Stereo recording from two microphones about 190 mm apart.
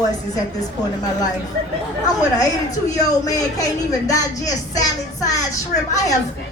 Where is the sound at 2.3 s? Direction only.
20° left (ahead or behind).